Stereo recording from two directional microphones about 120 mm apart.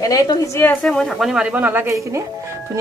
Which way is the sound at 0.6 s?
5° left (ahead or behind).